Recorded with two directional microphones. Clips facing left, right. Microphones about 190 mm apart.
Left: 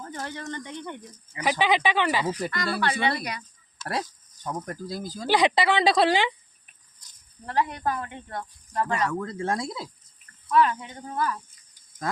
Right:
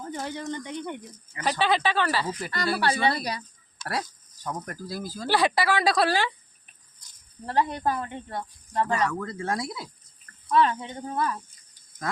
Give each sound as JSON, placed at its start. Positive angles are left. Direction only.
{"t": 0.0, "sound": "speech", "side_deg": -15}
{"t": 1.4, "sound": "speech", "side_deg": 15}
{"t": 2.5, "sound": "speech", "side_deg": -35}
{"t": 4.4, "sound": "speech", "side_deg": 25}
{"t": 7.4, "sound": "speech", "side_deg": -30}
{"t": 9.2, "sound": "speech", "side_deg": 20}
{"t": 10.5, "sound": "speech", "side_deg": -30}